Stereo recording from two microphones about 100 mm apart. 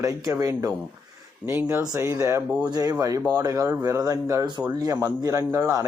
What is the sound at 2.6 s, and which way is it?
Speech, 40° right (ahead or behind).